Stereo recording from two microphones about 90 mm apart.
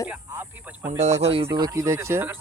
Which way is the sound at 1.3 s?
90° right.